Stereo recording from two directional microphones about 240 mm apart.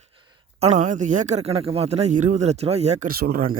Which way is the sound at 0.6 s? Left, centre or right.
Right.